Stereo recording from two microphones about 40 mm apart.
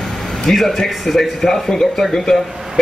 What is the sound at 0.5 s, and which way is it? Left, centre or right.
Speech, centre.